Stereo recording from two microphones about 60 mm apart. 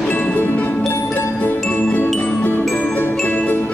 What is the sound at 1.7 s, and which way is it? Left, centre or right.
Jingle, left.